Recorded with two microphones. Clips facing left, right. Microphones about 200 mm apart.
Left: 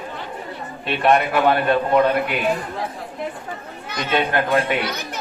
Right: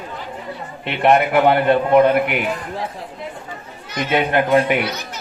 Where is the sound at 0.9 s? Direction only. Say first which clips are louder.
Right 2 dB; 20° right (ahead or behind).